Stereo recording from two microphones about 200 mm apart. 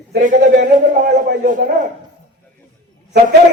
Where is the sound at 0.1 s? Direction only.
40° right (ahead or behind).